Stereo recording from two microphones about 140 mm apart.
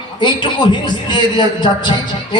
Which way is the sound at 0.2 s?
35° left (ahead or behind).